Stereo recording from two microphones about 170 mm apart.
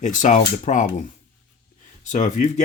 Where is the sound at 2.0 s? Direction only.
45° left (ahead or behind).